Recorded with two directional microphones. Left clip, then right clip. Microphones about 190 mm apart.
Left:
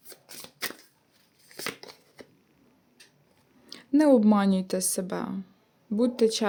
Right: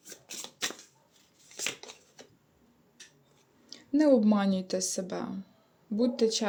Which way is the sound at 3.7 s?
30° left (ahead or behind).